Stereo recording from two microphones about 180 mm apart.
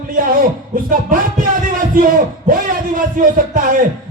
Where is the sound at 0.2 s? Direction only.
50° right (ahead or behind).